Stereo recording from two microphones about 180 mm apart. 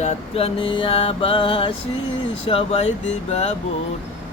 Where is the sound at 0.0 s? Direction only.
30° left (ahead or behind).